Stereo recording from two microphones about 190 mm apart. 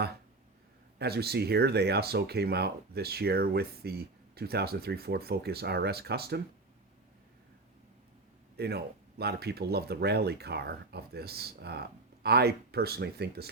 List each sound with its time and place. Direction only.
0.9 s speech: 55° right (ahead or behind)
8.5 s speech: 55° right (ahead or behind)